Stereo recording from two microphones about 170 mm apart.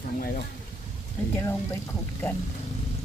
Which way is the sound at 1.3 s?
15° left (ahead or behind).